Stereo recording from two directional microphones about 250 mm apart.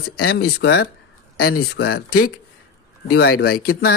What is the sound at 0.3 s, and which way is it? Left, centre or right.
Speech, left.